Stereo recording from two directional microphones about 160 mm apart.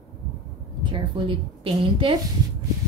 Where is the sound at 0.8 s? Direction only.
30° right (ahead or behind).